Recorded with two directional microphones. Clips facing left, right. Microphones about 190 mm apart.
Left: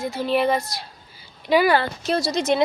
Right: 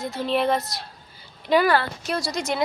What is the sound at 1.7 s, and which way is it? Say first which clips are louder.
Speech: left 3 dB; 20° left (ahead or behind).